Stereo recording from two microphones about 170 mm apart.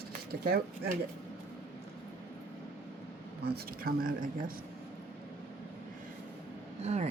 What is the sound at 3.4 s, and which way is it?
Speech, 70° right (ahead or behind).